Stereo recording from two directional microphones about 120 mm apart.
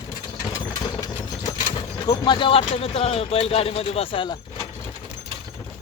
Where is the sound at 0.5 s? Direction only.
35° left (ahead or behind).